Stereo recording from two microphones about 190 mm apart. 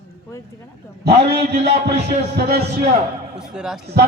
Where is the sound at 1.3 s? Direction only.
30° right (ahead or behind).